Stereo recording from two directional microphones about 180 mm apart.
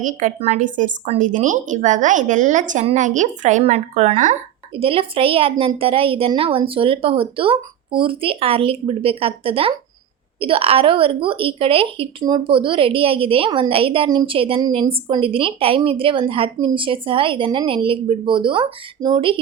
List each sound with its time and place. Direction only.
0.0 s a woman's voice: 45° right (ahead or behind); by 19.4 s 25° right (ahead or behind)